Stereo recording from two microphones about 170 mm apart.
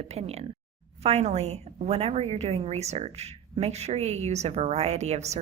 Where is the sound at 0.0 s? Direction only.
40° right (ahead or behind).